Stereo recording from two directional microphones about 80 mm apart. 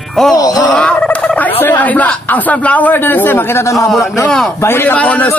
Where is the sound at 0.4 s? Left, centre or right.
Left.